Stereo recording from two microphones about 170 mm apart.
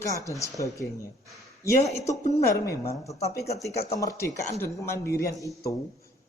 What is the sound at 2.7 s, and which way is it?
Speech, 20° left (ahead or behind).